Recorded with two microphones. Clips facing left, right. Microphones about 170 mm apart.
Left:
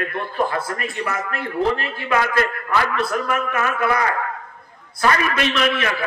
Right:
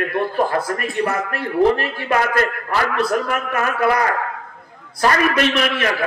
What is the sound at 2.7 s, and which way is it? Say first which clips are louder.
A man's voice: right 2 dB; 35° right (ahead or behind).